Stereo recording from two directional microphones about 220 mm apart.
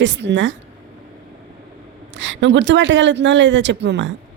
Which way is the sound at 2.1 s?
55° right (ahead or behind).